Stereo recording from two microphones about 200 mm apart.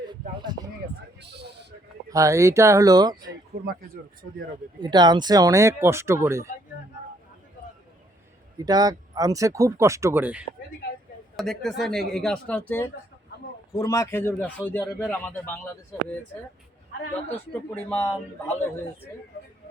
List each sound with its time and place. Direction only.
0.0 s a sound: 20° right (ahead or behind)
1.2 s a sound: 55° right (ahead or behind)
2.0 s speech: 15° right (ahead or behind)
4.8 s speech: 20° right (ahead or behind)
8.5 s a man's voice: 20° right (ahead or behind); by 16.0 s 10° left (ahead or behind)
17.5 s a man's voice: 10° left (ahead or behind)